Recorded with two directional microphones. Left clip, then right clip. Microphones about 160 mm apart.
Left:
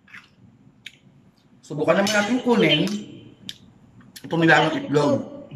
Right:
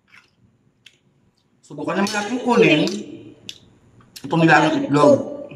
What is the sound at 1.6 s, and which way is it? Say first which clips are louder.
Speech: left 4 dB; 10° right (ahead or behind).